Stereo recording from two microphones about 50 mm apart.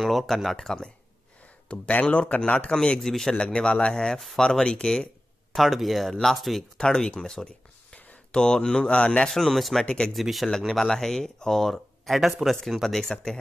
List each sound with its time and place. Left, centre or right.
0.0 s speech: centre; by 2.7 s left
2.7 s speech: centre
5.5 s speech: centre
6.8 s speech: centre
9.3 s speech: centre
9.8 s speech: left
10.1 s speech: centre
12.8 s speech: centre